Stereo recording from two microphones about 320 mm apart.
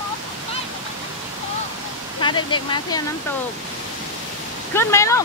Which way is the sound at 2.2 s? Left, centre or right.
Centre.